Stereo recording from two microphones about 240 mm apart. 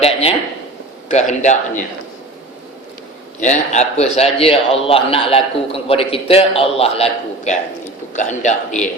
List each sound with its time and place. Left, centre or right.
0.0 s a sound: left
1.0 s a man's voice: left
3.4 s a man's voice: left